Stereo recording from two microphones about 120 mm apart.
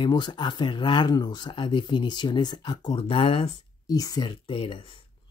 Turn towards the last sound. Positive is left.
turn(degrees=50)  # may be behind; listen again after turning